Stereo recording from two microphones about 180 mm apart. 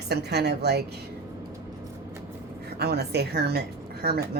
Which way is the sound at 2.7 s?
65° right (ahead or behind).